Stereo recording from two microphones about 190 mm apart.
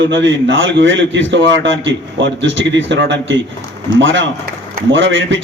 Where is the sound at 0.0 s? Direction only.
75° right (ahead or behind).